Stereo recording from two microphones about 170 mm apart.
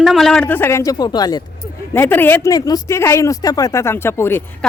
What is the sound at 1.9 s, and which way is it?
Speech, 15° left (ahead or behind).